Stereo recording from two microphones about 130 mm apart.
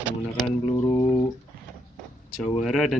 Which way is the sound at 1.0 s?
30° left (ahead or behind).